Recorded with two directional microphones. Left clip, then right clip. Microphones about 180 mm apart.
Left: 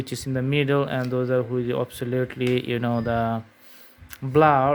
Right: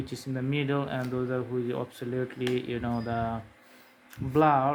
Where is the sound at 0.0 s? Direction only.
50° left (ahead or behind).